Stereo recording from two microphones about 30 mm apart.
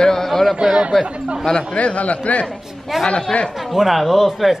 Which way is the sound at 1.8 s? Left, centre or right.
Left.